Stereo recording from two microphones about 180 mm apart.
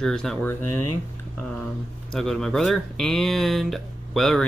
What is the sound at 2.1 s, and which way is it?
Speech, centre (ahead or behind).